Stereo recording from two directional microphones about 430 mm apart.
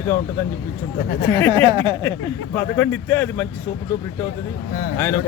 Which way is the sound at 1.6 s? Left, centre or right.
Centre.